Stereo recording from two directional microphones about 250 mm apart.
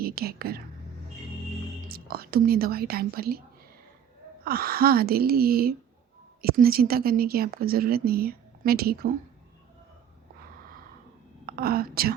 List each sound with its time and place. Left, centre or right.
0.0 s a woman's voice: right
1.9 s speech: right
4.4 s speech: right
11.4 s a woman's voice: right